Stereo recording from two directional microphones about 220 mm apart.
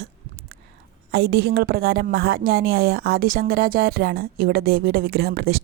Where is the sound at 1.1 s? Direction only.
50° right (ahead or behind).